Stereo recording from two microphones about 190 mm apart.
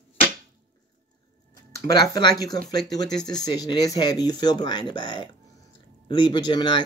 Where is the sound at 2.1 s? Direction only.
20° left (ahead or behind).